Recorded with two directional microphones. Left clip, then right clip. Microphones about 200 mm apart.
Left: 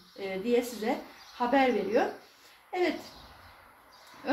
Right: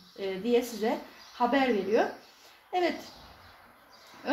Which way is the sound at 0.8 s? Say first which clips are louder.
Right 2 dB; 40° right (ahead or behind).